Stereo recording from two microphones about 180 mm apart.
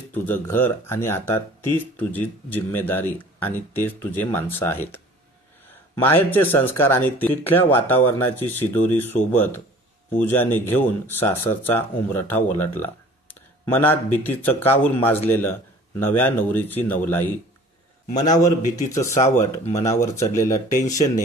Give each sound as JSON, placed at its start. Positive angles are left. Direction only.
{"t": 0.1, "sound": "a man's voice", "side_deg": 10}